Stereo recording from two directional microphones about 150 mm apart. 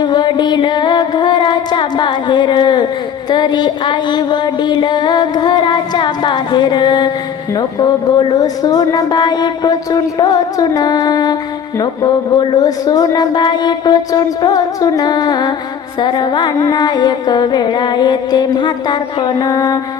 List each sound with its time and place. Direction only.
0.0 s music: 30° left (ahead or behind)